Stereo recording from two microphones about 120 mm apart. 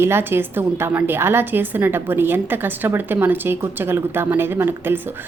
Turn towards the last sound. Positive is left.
turn(degrees=-20)  # may be behind; listen again after turning